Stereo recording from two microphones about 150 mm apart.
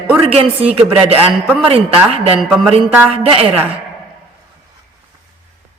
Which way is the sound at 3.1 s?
40° right (ahead or behind).